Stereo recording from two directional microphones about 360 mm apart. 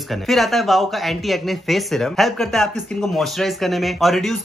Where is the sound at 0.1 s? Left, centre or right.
Centre.